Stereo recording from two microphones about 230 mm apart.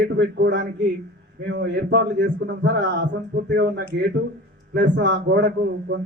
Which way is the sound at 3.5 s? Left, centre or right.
Right.